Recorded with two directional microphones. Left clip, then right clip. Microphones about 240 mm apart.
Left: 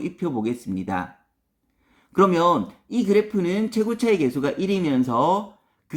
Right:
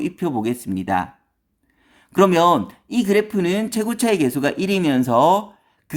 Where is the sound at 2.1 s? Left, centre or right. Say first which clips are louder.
Right 4 dB; right.